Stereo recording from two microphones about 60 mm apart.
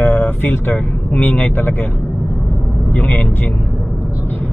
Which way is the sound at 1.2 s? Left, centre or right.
Left.